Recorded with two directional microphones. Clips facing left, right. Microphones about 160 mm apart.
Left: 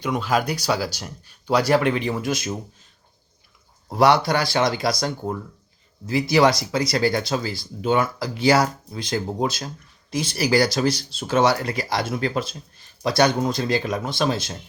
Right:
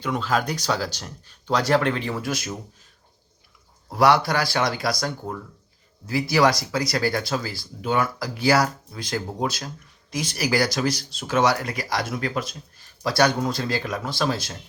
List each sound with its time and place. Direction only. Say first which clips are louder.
0.0 s speech: left 2 dB; 15° left (ahead or behind)
3.8 s speech: left 1 dB; 25° left (ahead or behind)